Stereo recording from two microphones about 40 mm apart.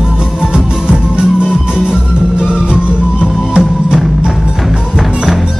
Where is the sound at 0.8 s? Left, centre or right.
Right.